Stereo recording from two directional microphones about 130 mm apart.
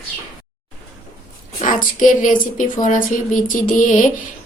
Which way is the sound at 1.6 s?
80° left.